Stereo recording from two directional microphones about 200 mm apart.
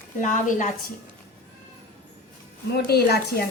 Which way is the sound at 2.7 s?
55° left (ahead or behind).